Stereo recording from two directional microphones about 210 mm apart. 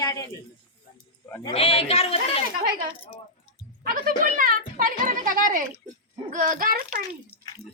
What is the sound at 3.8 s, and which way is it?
A woman's voice, 45° right (ahead or behind).